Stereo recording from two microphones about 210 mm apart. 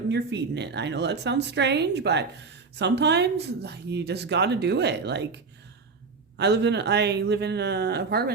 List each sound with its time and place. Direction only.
0.1 s a woman's voice: 55° right (ahead or behind)